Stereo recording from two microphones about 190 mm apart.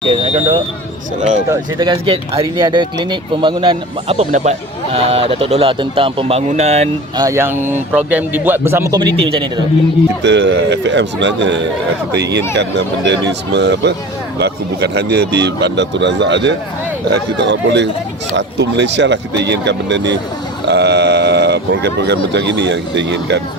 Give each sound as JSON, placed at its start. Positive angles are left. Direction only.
{"t": 0.1, "sound": "a sound", "side_deg": -35}
{"t": 1.5, "sound": "speech", "side_deg": -25}
{"t": 7.2, "sound": "speech", "side_deg": -15}
{"t": 10.2, "sound": "speech", "side_deg": -65}